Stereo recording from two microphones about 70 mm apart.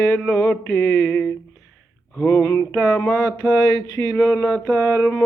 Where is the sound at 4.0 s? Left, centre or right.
Left.